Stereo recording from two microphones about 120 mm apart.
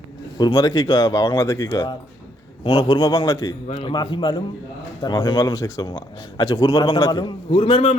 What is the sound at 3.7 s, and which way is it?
A man's voice, 50° left (ahead or behind).